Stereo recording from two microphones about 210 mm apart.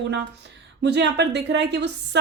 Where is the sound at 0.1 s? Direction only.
55° right (ahead or behind).